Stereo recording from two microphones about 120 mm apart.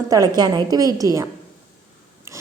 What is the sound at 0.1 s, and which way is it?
A woman's voice, 30° right (ahead or behind).